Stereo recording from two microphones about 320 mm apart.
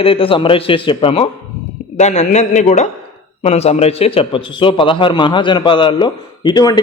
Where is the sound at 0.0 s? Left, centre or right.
Centre.